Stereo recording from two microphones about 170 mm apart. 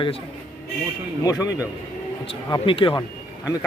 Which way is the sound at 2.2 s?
30° left (ahead or behind).